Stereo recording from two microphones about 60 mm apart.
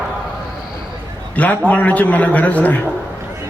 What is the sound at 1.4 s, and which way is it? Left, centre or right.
A man's voice, left.